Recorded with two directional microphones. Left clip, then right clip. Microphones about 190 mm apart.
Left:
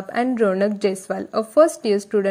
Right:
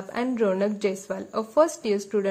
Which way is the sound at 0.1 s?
25° left (ahead or behind).